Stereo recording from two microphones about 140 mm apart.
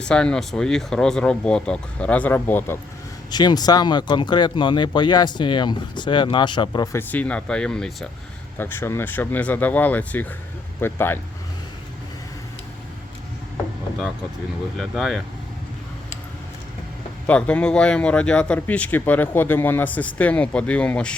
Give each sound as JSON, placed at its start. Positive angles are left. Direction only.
{"t": 0.0, "sound": "speech", "side_deg": 5}
{"t": 3.3, "sound": "speech", "side_deg": 30}
{"t": 6.9, "sound": "speech", "side_deg": 10}
{"t": 8.5, "sound": "speech", "side_deg": 15}
{"t": 14.8, "sound": "speech", "side_deg": 0}
{"t": 17.2, "sound": "speech", "side_deg": 10}